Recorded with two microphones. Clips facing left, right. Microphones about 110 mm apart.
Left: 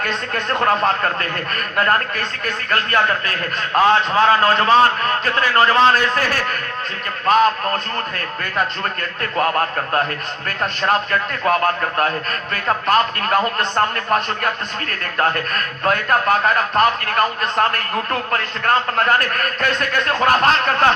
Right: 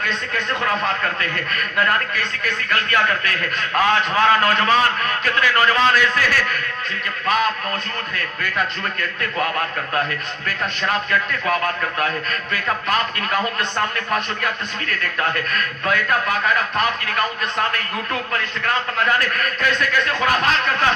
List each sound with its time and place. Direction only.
0.3 s a man's voice: 40° left (ahead or behind)